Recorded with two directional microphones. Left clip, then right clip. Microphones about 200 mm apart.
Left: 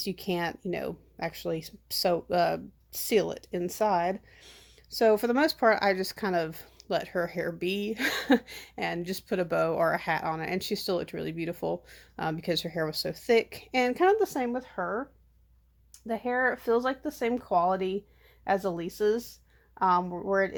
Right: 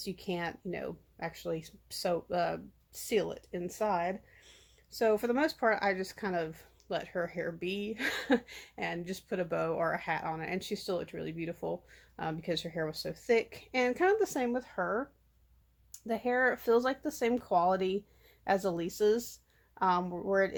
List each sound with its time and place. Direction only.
0.0 s speech: 40° left (ahead or behind); by 20.6 s 15° left (ahead or behind)